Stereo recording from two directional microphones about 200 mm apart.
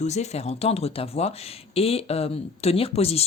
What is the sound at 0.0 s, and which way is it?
Speech, 35° left (ahead or behind).